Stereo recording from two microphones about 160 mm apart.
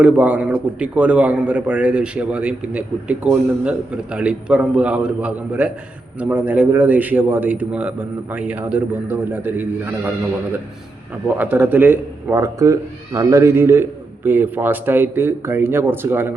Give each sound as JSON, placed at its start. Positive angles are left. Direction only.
{"t": 0.0, "sound": "a man's voice", "side_deg": -10}
{"t": 11.3, "sound": "a man's voice", "side_deg": -10}